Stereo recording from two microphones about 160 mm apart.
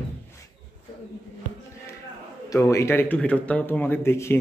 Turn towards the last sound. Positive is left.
turn(degrees=15)  # may be behind; listen again after turning